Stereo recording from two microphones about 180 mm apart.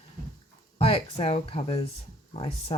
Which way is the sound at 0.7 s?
35° left (ahead or behind).